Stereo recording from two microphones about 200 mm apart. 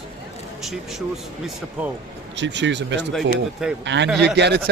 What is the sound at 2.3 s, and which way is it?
Speech, 60° right (ahead or behind).